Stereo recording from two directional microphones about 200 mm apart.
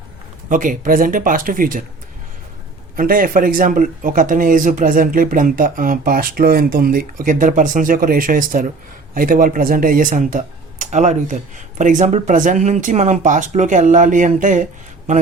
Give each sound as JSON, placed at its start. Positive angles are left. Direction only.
{"t": 0.5, "sound": "speech", "side_deg": -40}
{"t": 2.9, "sound": "speech", "side_deg": -45}